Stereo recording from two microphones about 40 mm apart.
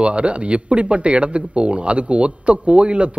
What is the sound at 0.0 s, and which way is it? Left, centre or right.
Speech, right.